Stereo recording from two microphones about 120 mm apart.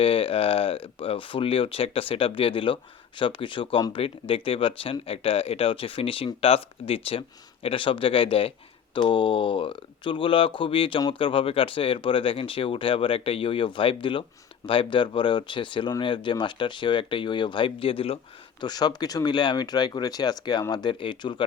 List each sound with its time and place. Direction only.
0.0 s speech: 50° left (ahead or behind)
18.6 s speech: 35° left (ahead or behind)